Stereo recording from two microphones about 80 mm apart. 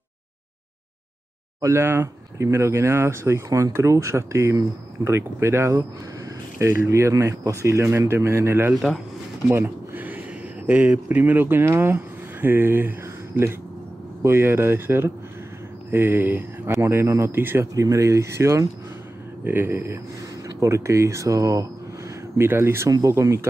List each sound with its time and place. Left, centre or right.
1.6 s speech: right
9.5 s a sound: right
10.7 s speech: centre
14.2 s speech: right
17.7 s speech: right
19.4 s speech: right
22.4 s speech: right
22.8 s speech: right